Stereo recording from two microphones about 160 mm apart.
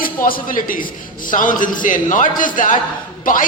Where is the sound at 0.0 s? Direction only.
65° left (ahead or behind).